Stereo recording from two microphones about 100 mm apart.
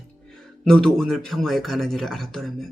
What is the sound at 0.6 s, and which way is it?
Speech, 5° left (ahead or behind).